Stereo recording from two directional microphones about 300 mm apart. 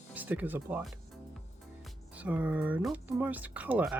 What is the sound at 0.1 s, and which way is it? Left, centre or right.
Speech, centre.